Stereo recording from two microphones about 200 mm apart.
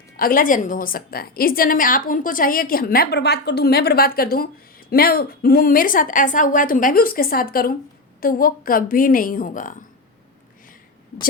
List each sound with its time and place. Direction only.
0.2 s a woman's voice: 45° left (ahead or behind)